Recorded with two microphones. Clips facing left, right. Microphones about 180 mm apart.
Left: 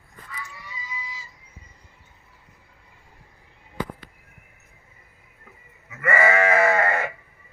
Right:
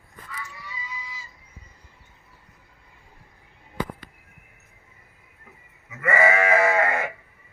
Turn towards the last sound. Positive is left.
turn(degrees=-10)  # may be behind; listen again after turning